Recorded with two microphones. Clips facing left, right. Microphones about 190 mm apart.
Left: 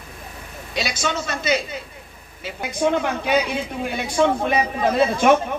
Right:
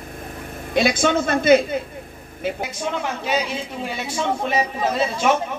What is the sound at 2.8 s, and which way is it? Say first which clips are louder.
Speech: left 7 dB; 55° left (ahead or behind).